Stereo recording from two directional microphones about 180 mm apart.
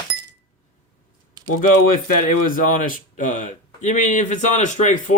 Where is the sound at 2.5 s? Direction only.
50° left (ahead or behind).